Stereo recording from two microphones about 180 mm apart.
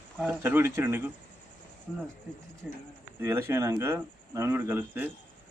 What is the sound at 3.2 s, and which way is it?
A man's voice, 15° right (ahead or behind).